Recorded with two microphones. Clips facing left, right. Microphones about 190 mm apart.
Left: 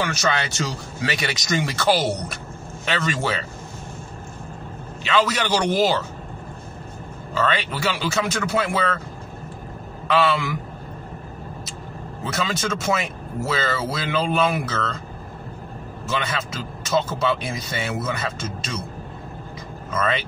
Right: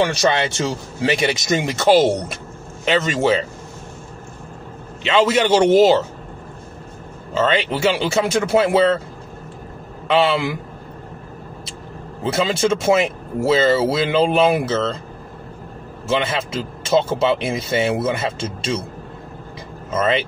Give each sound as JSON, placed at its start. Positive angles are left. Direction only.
{"t": 0.1, "sound": "speech", "side_deg": -30}
{"t": 5.0, "sound": "speech", "side_deg": -25}
{"t": 7.3, "sound": "speech", "side_deg": -25}
{"t": 10.0, "sound": "a man's voice", "side_deg": -25}
{"t": 12.3, "sound": "speech", "side_deg": -30}
{"t": 16.1, "sound": "speech", "side_deg": -25}
{"t": 19.9, "sound": "speech", "side_deg": -25}